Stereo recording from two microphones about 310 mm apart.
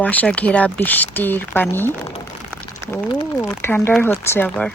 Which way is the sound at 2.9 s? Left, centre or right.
Centre.